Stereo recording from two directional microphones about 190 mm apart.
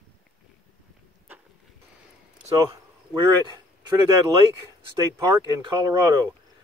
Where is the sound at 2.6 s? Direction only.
15° right (ahead or behind).